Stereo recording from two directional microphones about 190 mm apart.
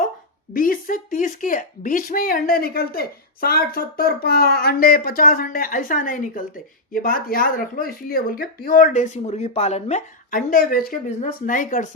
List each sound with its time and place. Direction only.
0.5 s speech: 45° left (ahead or behind)